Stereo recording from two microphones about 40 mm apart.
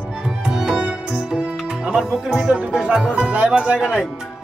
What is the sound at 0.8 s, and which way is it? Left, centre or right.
Music, right.